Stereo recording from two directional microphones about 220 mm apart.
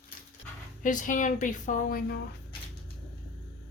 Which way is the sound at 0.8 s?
35° left (ahead or behind).